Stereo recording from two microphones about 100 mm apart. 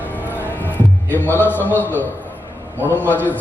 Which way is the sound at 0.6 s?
20° left (ahead or behind).